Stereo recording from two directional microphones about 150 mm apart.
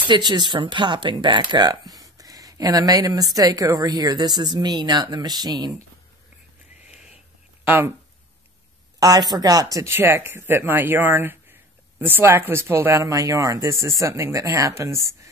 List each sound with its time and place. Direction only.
0.1 s speech: 30° right (ahead or behind)
7.6 s speech: 15° right (ahead or behind)
9.0 s speech: 25° right (ahead or behind)